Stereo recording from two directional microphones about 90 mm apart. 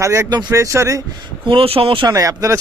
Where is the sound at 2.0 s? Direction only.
40° right (ahead or behind).